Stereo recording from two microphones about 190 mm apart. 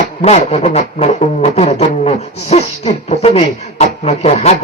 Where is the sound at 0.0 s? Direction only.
35° left (ahead or behind).